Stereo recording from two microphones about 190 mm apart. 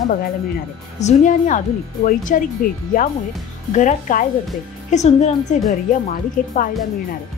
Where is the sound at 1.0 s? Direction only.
40° left (ahead or behind).